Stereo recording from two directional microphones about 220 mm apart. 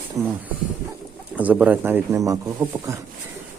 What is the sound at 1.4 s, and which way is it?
Speech, 5° right (ahead or behind).